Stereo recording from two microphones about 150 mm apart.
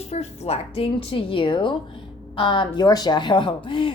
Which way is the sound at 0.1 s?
45° left (ahead or behind).